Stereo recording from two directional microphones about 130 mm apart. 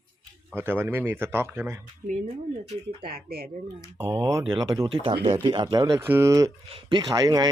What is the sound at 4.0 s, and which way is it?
Speech, 25° right (ahead or behind).